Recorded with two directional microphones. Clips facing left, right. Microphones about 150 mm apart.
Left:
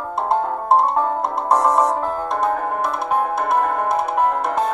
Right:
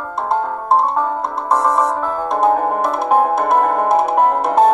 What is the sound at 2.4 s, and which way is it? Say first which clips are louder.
Music: right 8 dB; 30° right (ahead or behind).